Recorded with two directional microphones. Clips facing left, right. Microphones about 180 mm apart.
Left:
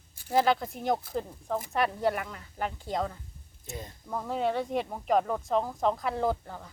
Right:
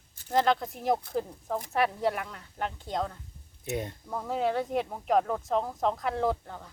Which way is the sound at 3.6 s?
65° right (ahead or behind).